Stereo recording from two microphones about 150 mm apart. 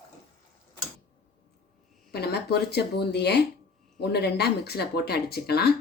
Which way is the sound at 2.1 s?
90° left.